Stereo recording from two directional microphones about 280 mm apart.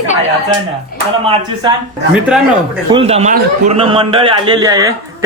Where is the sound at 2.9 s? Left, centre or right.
Right.